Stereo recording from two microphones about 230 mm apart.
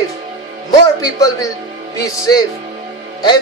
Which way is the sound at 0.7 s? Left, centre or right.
Centre.